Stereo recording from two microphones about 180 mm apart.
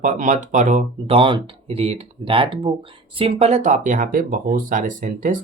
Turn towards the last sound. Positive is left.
turn(degrees=-50)  # may be behind; listen again after turning